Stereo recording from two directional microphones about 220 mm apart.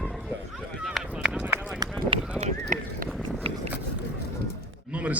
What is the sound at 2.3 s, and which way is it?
Run, 35° right (ahead or behind).